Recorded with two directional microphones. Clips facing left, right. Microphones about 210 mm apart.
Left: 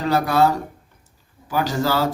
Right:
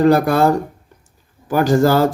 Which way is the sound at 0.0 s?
50° right (ahead or behind).